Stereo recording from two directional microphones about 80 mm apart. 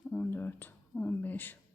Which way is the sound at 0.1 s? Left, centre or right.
Left.